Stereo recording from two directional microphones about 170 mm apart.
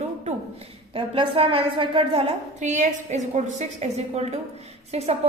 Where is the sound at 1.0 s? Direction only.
30° right (ahead or behind).